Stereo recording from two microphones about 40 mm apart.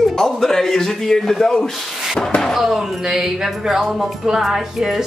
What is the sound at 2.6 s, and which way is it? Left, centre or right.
Speech, centre.